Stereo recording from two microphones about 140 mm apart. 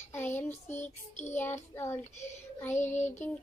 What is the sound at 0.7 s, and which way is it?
Child singing, 55° left (ahead or behind).